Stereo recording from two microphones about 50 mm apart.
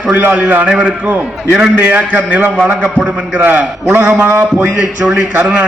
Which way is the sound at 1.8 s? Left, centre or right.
Right.